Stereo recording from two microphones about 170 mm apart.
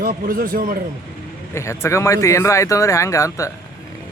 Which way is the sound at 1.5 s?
15° left (ahead or behind).